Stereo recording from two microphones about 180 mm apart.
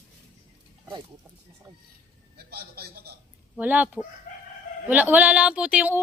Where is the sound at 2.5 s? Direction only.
60° right (ahead or behind).